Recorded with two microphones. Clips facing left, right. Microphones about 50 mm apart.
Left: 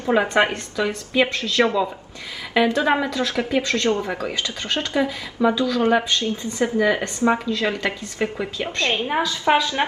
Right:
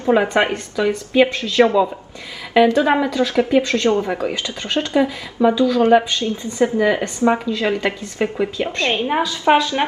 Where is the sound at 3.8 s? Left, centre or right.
Right.